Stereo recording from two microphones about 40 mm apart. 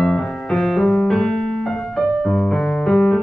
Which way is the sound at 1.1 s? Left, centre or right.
Centre.